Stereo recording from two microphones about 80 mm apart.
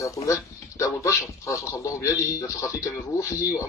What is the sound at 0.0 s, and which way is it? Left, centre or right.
Speech, left.